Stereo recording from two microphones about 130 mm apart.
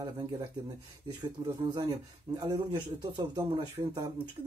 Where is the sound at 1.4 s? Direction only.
35° right (ahead or behind).